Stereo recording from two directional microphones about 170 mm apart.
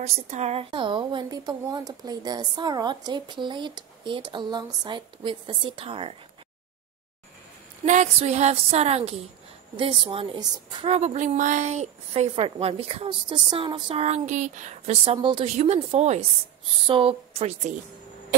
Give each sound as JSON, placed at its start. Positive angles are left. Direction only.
{"t": 0.0, "sound": "a woman's voice", "side_deg": -40}
{"t": 7.8, "sound": "a woman's voice", "side_deg": -45}